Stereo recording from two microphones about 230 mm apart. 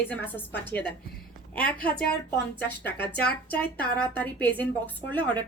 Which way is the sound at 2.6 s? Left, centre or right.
Left.